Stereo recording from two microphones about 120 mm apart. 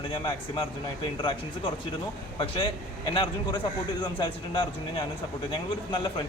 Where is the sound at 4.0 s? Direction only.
40° left (ahead or behind).